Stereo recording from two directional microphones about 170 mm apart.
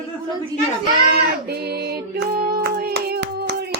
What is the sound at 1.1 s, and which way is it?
Female singing, 75° right (ahead or behind).